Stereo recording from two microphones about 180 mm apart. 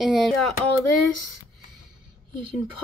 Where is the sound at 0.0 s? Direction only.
Centre (ahead or behind).